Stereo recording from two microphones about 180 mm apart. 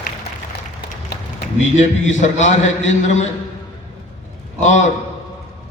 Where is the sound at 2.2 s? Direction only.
40° left (ahead or behind).